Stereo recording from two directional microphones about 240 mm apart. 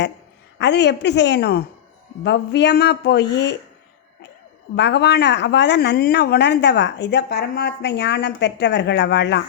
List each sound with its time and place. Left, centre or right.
0.6 s speech: left
4.7 s speech: left